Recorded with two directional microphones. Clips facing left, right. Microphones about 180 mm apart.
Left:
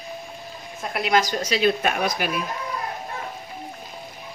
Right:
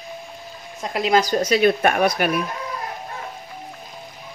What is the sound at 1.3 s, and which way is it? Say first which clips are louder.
Speech: right 4 dB; 50° right (ahead or behind).